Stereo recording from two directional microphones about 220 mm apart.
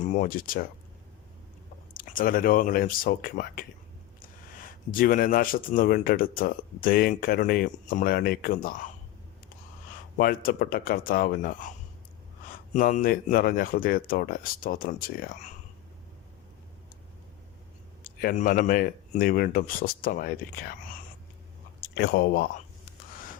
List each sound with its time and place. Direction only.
0.0 s speech: 35° left (ahead or behind)
1.9 s speech: 40° left (ahead or behind)
10.2 s speech: 40° left (ahead or behind)
12.7 s speech: 35° left (ahead or behind)
18.0 s speech: 40° left (ahead or behind)